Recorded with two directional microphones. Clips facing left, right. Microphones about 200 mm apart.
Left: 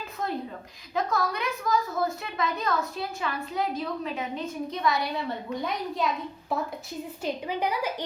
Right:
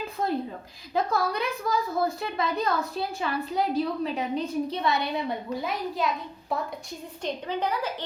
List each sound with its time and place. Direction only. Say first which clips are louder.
0.2 s a sound: right 4 dB; 30° right (ahead or behind)
0.9 s a woman's voice: right 2 dB; 30° right (ahead or behind)
5.6 s a woman's voice: even; centre (ahead or behind)
7.2 s a woman's voice: even; 10° left (ahead or behind)